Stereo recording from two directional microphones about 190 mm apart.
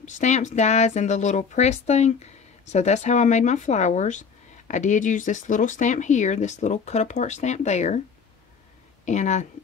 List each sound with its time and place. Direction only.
0.0 s speech: 40° left (ahead or behind)
9.0 s speech: 40° left (ahead or behind)